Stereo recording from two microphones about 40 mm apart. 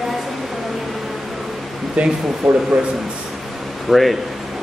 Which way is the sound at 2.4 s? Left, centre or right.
Centre.